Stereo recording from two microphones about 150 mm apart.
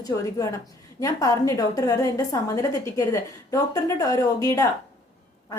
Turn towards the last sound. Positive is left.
turn(degrees=20)  # may be behind; listen again after turning